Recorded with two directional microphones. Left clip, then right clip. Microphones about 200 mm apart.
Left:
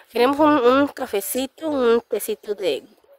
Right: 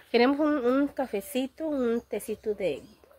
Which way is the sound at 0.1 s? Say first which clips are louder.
Left 7 dB; 55° left (ahead or behind).